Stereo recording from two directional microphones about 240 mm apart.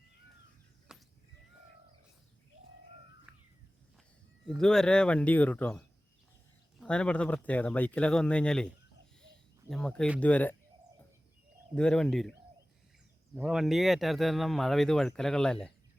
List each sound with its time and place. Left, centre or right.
0.9 s a sound: centre
3.3 s crow: centre
4.4 s speech: centre
11.7 s speech: centre
13.3 s speech: centre